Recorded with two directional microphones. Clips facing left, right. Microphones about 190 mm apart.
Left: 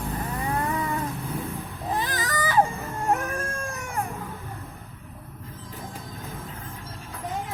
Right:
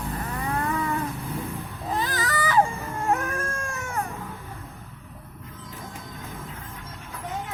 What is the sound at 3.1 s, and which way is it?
Cat, 15° left (ahead or behind).